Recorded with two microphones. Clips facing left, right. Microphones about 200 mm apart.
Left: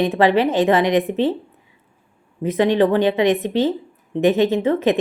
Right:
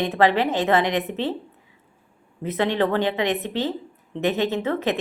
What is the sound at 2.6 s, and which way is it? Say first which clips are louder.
Speech: left 6 dB; 15° left (ahead or behind).